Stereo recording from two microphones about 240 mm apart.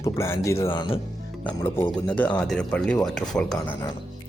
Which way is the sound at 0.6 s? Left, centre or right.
Left.